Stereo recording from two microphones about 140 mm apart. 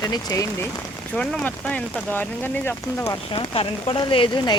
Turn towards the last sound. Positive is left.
turn(degrees=35)  # may be behind; listen again after turning